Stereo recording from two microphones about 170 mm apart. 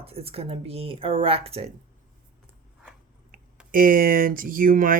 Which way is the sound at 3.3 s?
55° right (ahead or behind).